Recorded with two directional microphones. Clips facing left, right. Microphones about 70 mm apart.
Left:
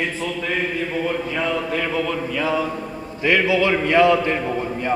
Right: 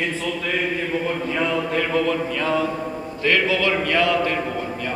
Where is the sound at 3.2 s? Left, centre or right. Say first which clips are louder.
Left 2 dB; centre.